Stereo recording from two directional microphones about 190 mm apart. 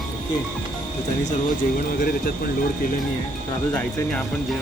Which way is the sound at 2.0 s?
55° left (ahead or behind).